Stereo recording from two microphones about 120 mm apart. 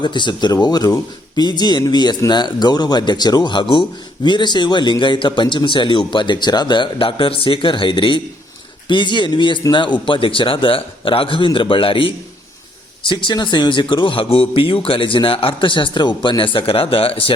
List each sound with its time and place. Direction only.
0.0 s speech: 40° left (ahead or behind)